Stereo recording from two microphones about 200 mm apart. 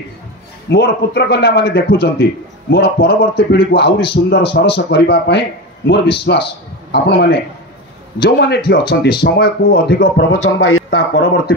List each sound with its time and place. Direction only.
0.7 s speech: 55° left (ahead or behind); by 10.8 s 80° left
10.9 s speech: 60° left (ahead or behind)